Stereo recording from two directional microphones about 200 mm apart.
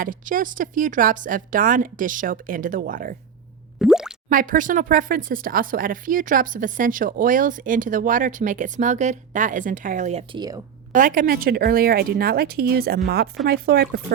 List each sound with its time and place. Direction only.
0.0 s speech: 40° right (ahead or behind)
3.8 s plop: centre (ahead or behind)
4.3 s speech: 40° right (ahead or behind)
10.9 s speech: 45° right (ahead or behind)